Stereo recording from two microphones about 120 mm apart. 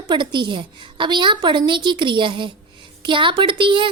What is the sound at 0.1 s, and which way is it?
A woman's voice, 40° right (ahead or behind).